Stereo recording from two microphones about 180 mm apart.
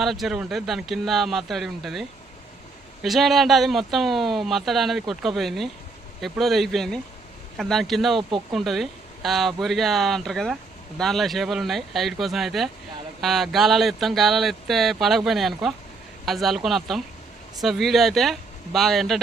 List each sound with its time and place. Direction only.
0.0 s speech: centre (ahead or behind)